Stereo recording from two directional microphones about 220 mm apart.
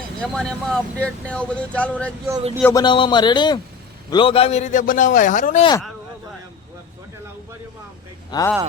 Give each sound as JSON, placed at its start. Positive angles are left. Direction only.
{"t": 0.2, "sound": "a man's voice", "side_deg": 5}
{"t": 2.8, "sound": "a man's voice", "side_deg": 20}
{"t": 8.3, "sound": "speech", "side_deg": 15}